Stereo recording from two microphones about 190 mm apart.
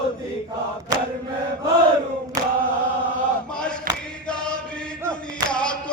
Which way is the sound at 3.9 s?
50° right (ahead or behind).